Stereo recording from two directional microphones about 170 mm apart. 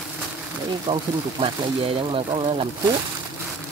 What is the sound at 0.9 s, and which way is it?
Speech, 30° right (ahead or behind).